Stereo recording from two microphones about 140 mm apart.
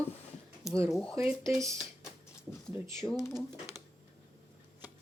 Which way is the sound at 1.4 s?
20° right (ahead or behind).